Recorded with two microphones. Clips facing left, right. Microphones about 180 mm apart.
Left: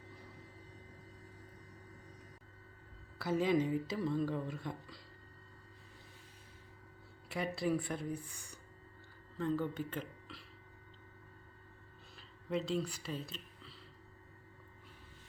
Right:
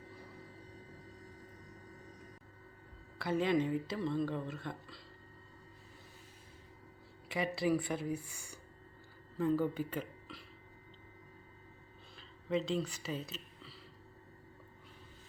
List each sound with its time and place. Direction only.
3.2 s speech: 5° left (ahead or behind)
7.3 s speech: centre (ahead or behind)
12.1 s a sound: centre (ahead or behind)